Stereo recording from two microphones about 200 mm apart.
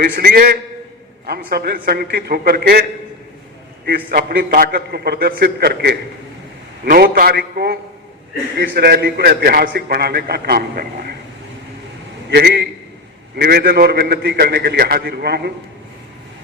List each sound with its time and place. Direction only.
0.0 s a man's voice: 50° right (ahead or behind)
3.8 s a man's voice: 50° right (ahead or behind)
12.3 s a man's voice: 55° right (ahead or behind)